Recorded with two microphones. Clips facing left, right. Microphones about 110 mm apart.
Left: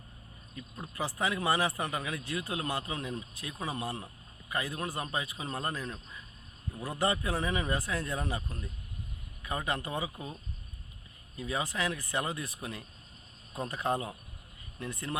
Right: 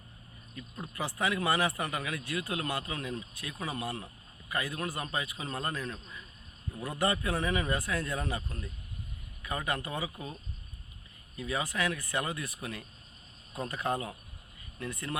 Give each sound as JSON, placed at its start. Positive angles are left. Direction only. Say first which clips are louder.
{"t": 0.5, "sound": "speech", "louder": "right 1 dB", "side_deg": 15}
{"t": 9.5, "sound": "speech", "louder": "even", "side_deg": 25}
{"t": 11.3, "sound": "speech", "louder": "even", "side_deg": 15}
{"t": 12.1, "sound": "speech", "louder": "even", "side_deg": 30}
{"t": 13.6, "sound": "speech", "louder": "left 1 dB", "side_deg": 10}